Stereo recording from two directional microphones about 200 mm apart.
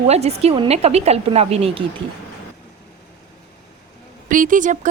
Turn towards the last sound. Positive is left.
turn(degrees=-40)  # may be behind; listen again after turning